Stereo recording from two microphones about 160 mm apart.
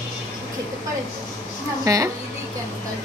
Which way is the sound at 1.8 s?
20° right (ahead or behind).